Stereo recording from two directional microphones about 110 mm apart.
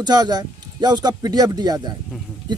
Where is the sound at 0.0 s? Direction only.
40° right (ahead or behind).